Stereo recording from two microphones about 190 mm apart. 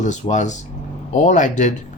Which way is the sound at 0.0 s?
40° left (ahead or behind).